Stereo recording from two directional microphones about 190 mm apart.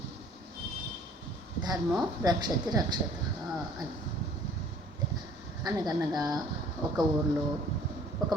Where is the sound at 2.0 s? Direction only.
20° right (ahead or behind).